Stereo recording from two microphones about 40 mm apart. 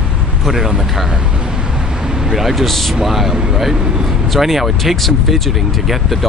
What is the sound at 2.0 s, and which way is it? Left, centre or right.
Vehicle, centre.